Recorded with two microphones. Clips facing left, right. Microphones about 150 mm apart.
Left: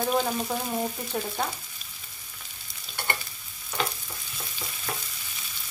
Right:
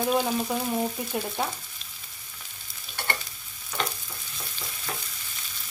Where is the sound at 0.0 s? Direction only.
5° right (ahead or behind).